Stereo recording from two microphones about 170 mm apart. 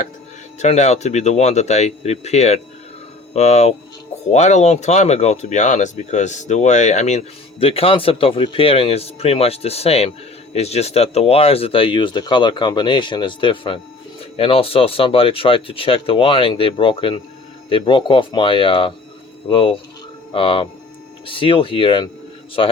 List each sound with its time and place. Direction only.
0.6 s speech: 40° left (ahead or behind)